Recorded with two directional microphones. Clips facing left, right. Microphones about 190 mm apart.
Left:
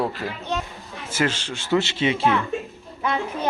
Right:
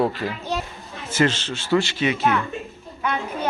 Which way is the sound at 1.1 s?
10° left (ahead or behind).